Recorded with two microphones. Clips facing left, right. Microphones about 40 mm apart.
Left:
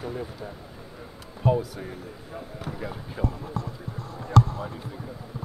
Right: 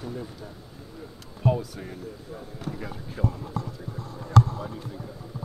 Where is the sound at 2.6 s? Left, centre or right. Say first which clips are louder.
Even; centre.